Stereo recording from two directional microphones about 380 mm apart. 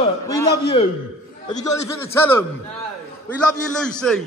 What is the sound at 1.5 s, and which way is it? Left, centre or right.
A man's voice, centre.